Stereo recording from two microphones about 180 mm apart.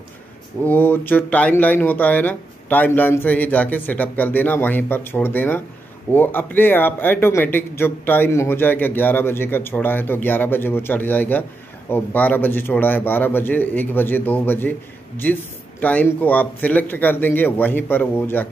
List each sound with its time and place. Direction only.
0.7 s a man's voice: 10° left (ahead or behind)